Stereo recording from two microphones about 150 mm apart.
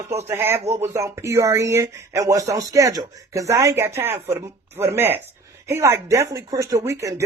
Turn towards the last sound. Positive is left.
turn(degrees=-20)  # may be behind; listen again after turning